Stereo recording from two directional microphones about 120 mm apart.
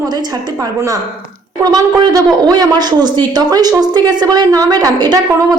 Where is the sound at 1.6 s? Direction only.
30° right (ahead or behind).